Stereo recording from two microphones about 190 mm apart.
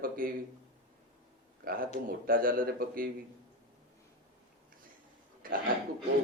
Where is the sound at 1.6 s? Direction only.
50° right (ahead or behind).